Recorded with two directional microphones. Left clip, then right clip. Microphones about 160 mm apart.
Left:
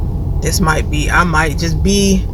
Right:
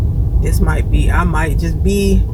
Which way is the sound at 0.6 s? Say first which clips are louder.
Left 8 dB; 25° left (ahead or behind).